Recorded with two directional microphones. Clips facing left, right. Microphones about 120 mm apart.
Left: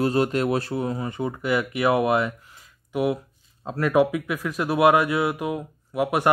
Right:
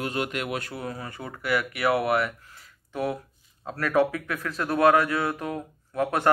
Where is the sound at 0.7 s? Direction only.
20° left (ahead or behind).